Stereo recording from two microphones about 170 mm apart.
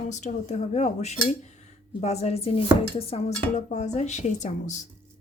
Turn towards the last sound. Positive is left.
turn(degrees=45)  # may be behind; listen again after turning